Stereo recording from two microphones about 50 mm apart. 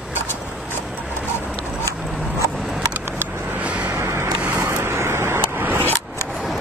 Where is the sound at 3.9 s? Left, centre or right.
Right.